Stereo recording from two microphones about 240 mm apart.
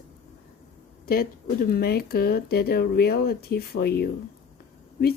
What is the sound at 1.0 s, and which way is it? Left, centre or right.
Speech, left.